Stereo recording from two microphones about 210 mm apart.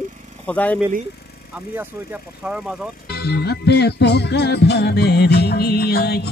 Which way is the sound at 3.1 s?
50° left (ahead or behind).